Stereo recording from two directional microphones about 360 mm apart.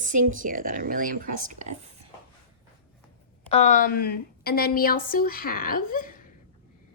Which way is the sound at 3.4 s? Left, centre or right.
Centre.